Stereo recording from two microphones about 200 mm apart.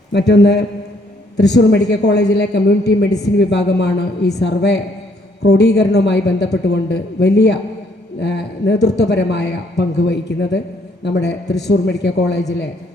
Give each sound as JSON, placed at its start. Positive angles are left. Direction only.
{"t": 0.1, "sound": "a man's voice", "side_deg": 60}